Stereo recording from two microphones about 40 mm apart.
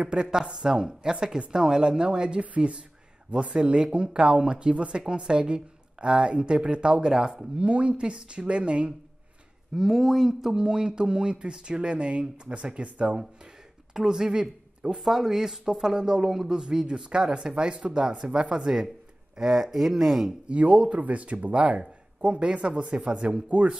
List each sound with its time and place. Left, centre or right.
0.0 s speech: right
9.8 s speech: centre; by 13.2 s right
13.9 s speech: centre
15.0 s speech: centre
20.4 s speech: right